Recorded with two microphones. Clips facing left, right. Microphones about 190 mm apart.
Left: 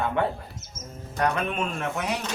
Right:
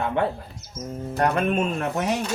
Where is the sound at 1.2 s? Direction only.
45° right (ahead or behind).